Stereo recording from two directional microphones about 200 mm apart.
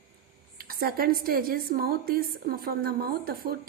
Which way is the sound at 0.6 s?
50° right (ahead or behind).